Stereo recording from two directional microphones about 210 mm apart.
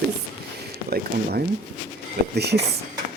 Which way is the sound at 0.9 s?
45° right (ahead or behind).